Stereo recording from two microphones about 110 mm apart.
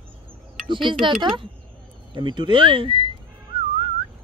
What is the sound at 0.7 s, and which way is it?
Speech, 50° right (ahead or behind).